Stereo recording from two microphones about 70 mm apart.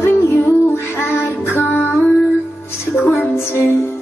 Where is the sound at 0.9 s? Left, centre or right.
Left.